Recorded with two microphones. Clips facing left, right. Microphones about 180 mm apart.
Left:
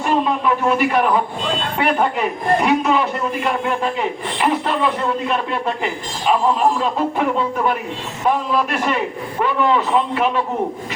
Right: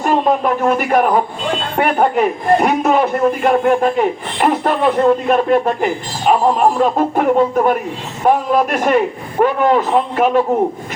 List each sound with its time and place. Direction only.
0.0 s a man's voice: 45° right (ahead or behind)